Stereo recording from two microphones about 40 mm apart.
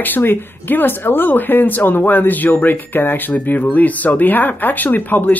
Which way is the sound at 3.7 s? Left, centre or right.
Left.